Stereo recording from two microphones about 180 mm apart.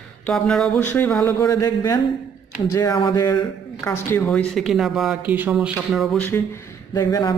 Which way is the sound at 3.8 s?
15° left (ahead or behind).